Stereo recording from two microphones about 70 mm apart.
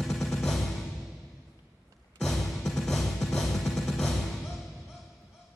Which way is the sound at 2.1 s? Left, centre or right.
Centre.